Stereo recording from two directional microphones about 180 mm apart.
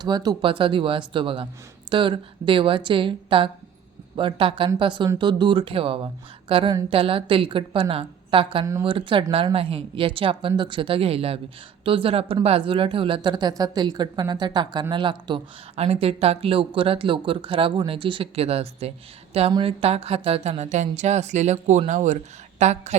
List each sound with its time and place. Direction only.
0.0 s speech: 20° right (ahead or behind); by 23.0 s 40° right (ahead or behind)